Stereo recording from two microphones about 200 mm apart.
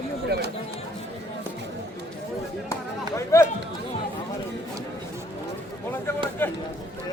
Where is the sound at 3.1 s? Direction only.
15° left (ahead or behind).